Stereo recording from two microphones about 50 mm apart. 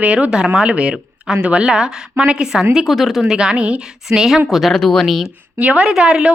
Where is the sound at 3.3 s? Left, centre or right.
Centre.